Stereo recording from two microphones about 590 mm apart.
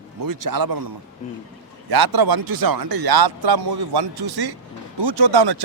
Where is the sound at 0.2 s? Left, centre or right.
Right.